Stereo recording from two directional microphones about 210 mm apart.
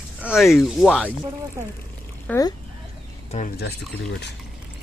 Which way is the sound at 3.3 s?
40° left (ahead or behind).